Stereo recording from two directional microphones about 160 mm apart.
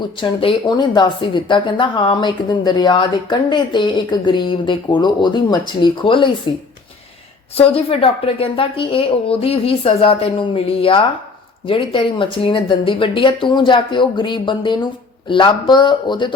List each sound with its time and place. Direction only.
0.2 s a woman's voice: 30° left (ahead or behind)
7.5 s a woman's voice: 35° left (ahead or behind)